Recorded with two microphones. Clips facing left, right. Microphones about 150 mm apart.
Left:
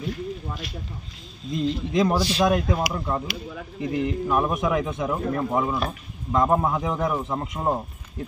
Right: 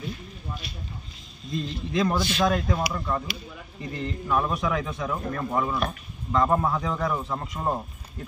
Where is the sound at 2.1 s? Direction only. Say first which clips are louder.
Left 3 dB; 30° left (ahead or behind).